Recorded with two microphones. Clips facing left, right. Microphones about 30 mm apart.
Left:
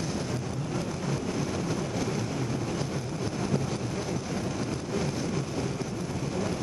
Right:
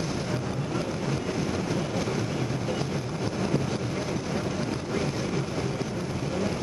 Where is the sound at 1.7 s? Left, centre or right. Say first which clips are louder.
Right 2 dB; centre.